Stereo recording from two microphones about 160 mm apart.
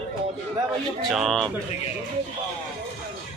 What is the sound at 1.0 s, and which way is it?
Speech, centre (ahead or behind).